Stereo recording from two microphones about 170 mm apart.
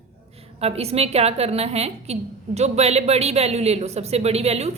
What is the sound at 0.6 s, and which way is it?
A woman's voice, 35° right (ahead or behind).